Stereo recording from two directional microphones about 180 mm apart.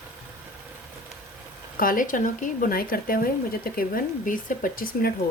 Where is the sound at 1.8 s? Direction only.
50° left (ahead or behind).